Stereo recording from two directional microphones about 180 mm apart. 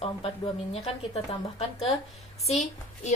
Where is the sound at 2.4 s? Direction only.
40° left (ahead or behind).